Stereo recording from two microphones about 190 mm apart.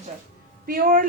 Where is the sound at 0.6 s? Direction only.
50° right (ahead or behind).